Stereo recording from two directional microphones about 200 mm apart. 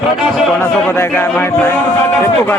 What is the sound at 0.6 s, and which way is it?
A man's voice, 10° left (ahead or behind).